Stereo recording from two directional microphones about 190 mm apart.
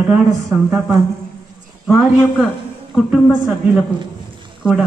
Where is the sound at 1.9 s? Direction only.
5° right (ahead or behind).